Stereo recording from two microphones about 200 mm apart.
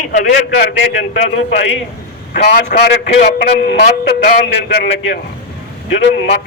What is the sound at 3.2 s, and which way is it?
A man's voice, 60° left (ahead or behind).